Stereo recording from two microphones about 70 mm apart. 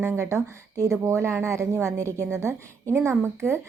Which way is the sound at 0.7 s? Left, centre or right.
Right.